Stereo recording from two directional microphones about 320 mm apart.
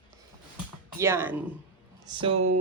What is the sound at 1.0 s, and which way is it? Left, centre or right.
Speech, centre.